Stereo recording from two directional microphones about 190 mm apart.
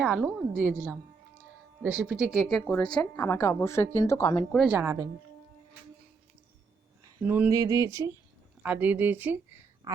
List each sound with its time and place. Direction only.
0.0 s a woman's voice: 5° right (ahead or behind); by 4.4 s 15° left (ahead or behind)
4.5 s speech: 5° right (ahead or behind)
7.0 s speech: 10° right (ahead or behind)
9.8 s a sound: 20° right (ahead or behind)